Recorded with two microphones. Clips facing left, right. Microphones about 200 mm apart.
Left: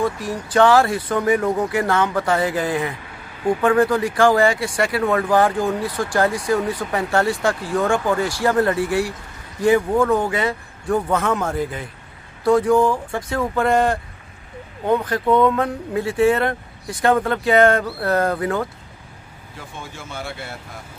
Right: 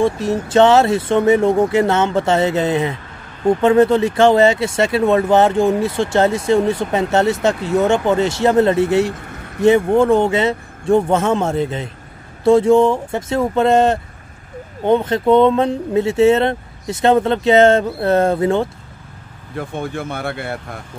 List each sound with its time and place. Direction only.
0.0 s speech: 25° right (ahead or behind)
19.5 s speech: 60° right (ahead or behind)